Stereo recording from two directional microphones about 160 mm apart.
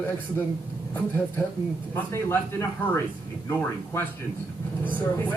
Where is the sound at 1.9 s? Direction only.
15° left (ahead or behind).